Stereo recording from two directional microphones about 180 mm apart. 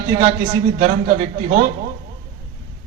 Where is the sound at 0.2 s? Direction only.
45° right (ahead or behind).